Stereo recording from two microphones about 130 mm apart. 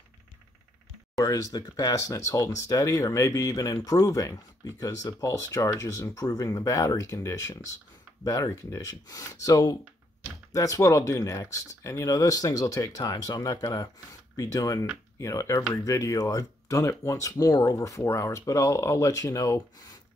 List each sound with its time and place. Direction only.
1.2 s speech: 25° left (ahead or behind)